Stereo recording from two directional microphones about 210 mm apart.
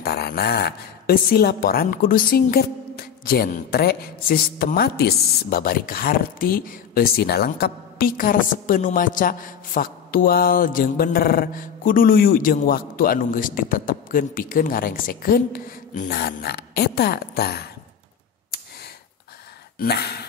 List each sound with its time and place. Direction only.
0.0 s speech: 45° left (ahead or behind)
19.8 s speech: 50° left (ahead or behind)